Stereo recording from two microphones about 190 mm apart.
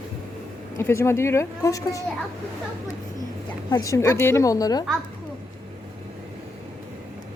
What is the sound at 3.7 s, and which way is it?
Speech, 15° left (ahead or behind).